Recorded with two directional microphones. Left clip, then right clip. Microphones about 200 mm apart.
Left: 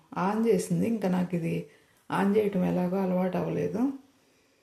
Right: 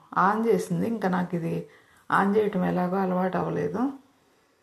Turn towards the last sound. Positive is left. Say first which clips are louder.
# right 2 dB
turn(degrees=10)  # may be behind; listen again after turning